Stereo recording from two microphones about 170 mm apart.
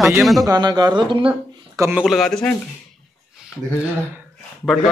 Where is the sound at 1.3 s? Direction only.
10° right (ahead or behind).